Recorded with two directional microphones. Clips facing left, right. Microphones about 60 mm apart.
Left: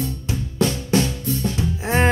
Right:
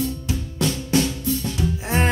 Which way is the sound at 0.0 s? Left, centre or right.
Left.